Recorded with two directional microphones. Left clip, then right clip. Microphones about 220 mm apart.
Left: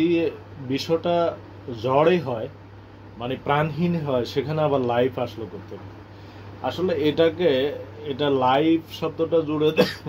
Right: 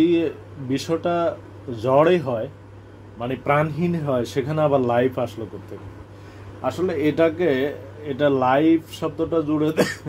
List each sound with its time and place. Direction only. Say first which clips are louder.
0.0 s speech: right 2 dB; 20° right (ahead or behind)
6.6 s speech: right 1 dB; 30° right (ahead or behind)